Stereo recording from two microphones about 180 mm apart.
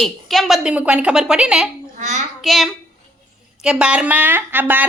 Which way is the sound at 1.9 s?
40° right (ahead or behind).